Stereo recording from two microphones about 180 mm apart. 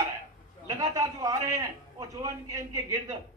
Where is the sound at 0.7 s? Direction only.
20° right (ahead or behind).